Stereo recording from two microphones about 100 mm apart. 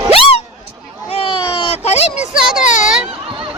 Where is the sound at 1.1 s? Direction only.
70° left (ahead or behind); by 2.1 s 90° left.